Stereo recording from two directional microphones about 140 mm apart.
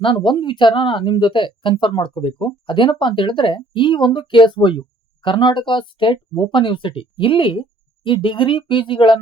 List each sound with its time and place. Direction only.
0.0 s speech: 35° left (ahead or behind)